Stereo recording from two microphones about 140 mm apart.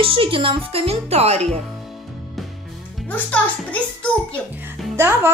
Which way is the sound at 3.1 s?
10° left (ahead or behind).